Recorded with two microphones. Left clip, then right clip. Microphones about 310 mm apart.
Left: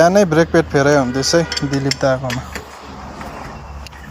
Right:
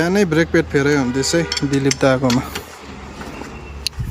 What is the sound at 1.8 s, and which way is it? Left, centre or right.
Speech, centre.